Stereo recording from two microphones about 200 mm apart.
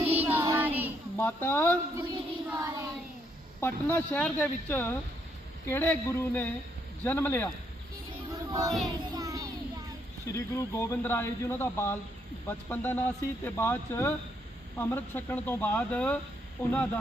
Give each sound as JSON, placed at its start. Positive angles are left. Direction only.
{"t": 0.0, "sound": "child singing", "side_deg": -30}
{"t": 0.3, "sound": "child singing", "side_deg": -10}
{"t": 1.2, "sound": "a man's voice", "side_deg": 10}
{"t": 2.5, "sound": "child singing", "side_deg": -15}
{"t": 3.6, "sound": "a man's voice", "side_deg": 10}
{"t": 8.3, "sound": "child singing", "side_deg": -15}
{"t": 9.1, "sound": "a sound", "side_deg": -15}
{"t": 10.2, "sound": "a man's voice", "side_deg": 15}